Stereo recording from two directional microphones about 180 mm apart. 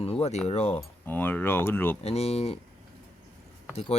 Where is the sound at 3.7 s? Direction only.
35° left (ahead or behind).